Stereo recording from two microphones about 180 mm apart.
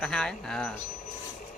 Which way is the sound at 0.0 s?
5° left (ahead or behind).